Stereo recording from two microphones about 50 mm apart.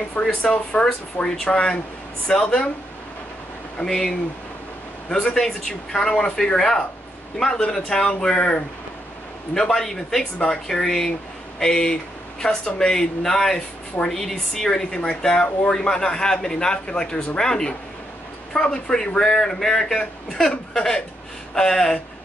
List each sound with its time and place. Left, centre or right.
0.2 s a man's voice: centre
3.7 s a man's voice: centre
5.1 s a man's voice: centre
9.8 s a man's voice: centre